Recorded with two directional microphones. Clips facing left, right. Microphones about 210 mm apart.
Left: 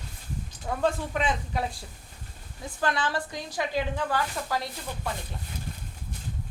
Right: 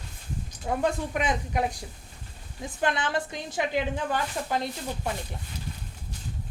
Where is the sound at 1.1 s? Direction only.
15° right (ahead or behind).